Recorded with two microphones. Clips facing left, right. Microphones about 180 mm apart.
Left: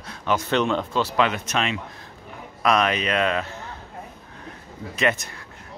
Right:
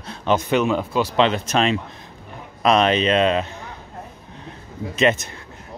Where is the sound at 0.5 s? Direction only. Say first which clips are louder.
Even; 5° right (ahead or behind).